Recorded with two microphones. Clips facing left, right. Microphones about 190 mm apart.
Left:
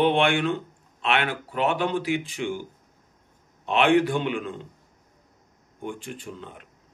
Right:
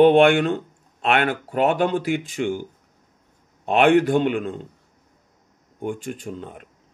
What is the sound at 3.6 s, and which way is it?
Speech, 50° right (ahead or behind).